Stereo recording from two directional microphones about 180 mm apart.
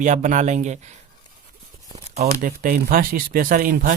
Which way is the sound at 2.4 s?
50° right (ahead or behind).